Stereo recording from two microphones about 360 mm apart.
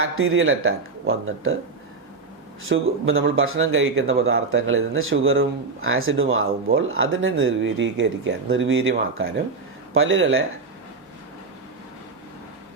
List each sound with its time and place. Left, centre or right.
0.0 s speech: right
2.6 s speech: right